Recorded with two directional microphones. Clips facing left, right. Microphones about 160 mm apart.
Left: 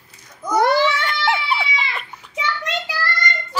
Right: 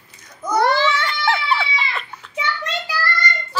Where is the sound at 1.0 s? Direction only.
20° left (ahead or behind).